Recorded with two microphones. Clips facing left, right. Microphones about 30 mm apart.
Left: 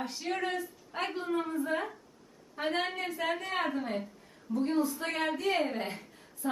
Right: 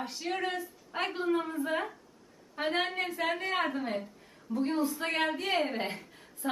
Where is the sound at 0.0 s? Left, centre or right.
Centre.